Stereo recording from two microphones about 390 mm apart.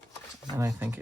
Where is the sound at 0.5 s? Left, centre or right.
Centre.